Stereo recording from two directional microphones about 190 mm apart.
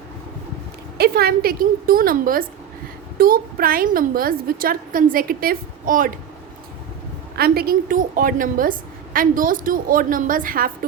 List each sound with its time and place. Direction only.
0.9 s a woman's voice: 55° right (ahead or behind)
7.3 s a woman's voice: 55° right (ahead or behind)